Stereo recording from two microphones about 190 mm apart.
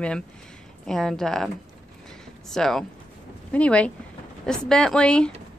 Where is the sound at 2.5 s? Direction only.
Centre (ahead or behind).